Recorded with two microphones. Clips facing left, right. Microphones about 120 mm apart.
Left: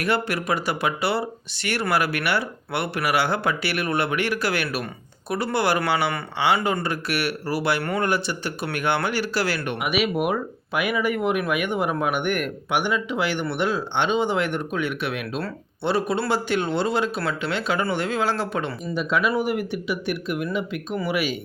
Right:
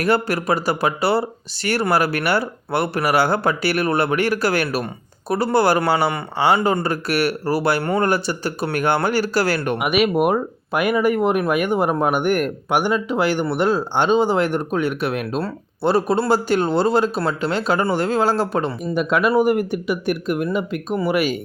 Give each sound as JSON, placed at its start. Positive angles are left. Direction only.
{"t": 0.0, "sound": "speech", "side_deg": -40}
{"t": 9.7, "sound": "speech", "side_deg": -55}
{"t": 18.9, "sound": "speech", "side_deg": -55}
{"t": 19.4, "sound": "speech", "side_deg": -45}